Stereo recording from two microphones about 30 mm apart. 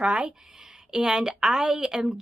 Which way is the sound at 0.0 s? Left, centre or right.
Right.